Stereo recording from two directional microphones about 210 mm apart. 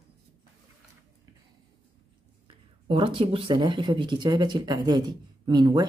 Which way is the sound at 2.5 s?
25° right (ahead or behind).